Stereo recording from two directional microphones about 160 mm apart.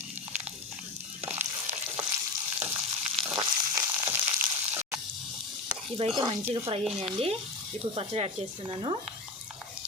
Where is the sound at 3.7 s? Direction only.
15° right (ahead or behind).